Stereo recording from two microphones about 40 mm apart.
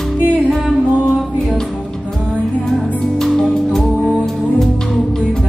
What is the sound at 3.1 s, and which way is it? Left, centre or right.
Music, centre.